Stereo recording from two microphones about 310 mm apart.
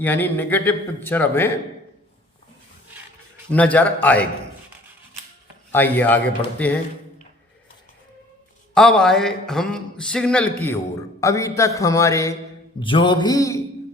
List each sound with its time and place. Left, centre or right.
0.0 s speech: centre
3.5 s speech: centre
5.7 s speech: centre
8.7 s a man's voice: centre